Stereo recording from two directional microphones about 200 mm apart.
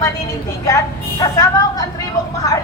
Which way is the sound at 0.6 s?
15° left (ahead or behind).